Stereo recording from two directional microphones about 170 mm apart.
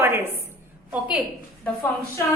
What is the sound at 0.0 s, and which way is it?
A woman's voice, 15° right (ahead or behind).